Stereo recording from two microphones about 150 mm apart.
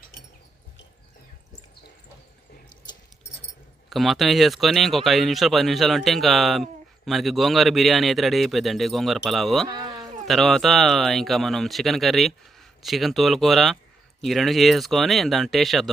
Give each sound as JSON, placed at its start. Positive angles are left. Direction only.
{"t": 3.8, "sound": "speech", "side_deg": 0}
{"t": 9.6, "sound": "sheep", "side_deg": -25}
{"t": 10.2, "sound": "speech", "side_deg": 0}